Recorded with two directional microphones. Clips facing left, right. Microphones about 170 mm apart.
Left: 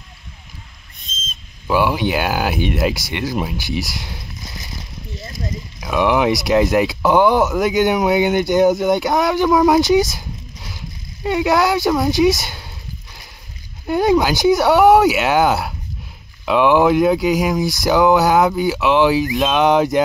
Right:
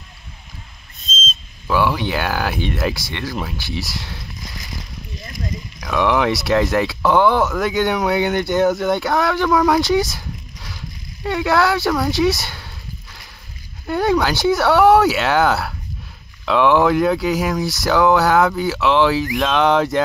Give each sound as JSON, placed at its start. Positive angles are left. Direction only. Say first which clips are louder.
{"t": 1.8, "sound": "speech", "louder": "left 2 dB", "side_deg": 15}
{"t": 3.9, "sound": "a sound", "louder": "even", "side_deg": 20}
{"t": 5.9, "sound": "speech", "louder": "left 2 dB", "side_deg": 10}
{"t": 9.6, "sound": "a sound", "louder": "left 4 dB", "side_deg": 20}
{"t": 11.2, "sound": "speech", "louder": "left 1 dB", "side_deg": 20}
{"t": 13.8, "sound": "speech", "louder": "left 3 dB", "side_deg": 15}